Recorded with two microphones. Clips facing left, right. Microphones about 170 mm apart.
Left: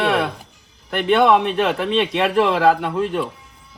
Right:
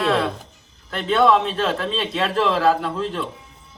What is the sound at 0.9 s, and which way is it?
A man's voice, 65° left (ahead or behind).